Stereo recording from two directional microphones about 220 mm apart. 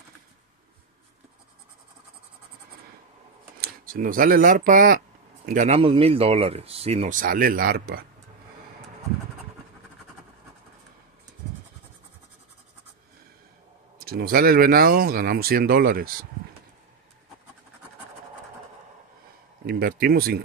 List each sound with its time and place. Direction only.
3.6 s speech: 40° right (ahead or behind)
13.9 s speech: 45° right (ahead or behind)
19.6 s speech: 45° right (ahead or behind)